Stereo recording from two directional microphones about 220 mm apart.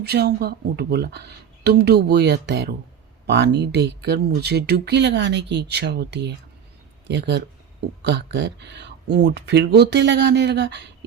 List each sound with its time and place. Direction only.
0.0 s speech: 45° right (ahead or behind)